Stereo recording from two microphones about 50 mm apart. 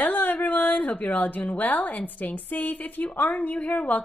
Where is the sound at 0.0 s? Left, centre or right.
Left.